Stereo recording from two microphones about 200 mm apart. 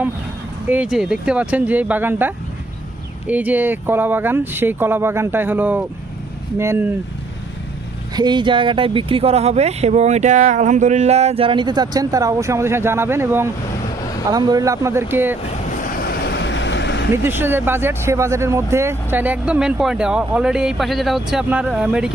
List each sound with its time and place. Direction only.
0.7 s speech: 5° right (ahead or behind)
8.1 s speech: 20° right (ahead or behind)
16.0 s vehicle: 55° left (ahead or behind)
17.1 s speech: 10° right (ahead or behind)